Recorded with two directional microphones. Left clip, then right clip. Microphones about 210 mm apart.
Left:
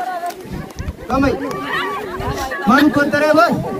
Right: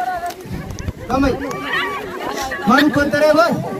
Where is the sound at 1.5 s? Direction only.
30° left (ahead or behind).